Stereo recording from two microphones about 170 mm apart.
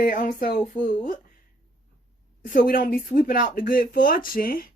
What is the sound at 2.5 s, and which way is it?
Speech, 55° left (ahead or behind).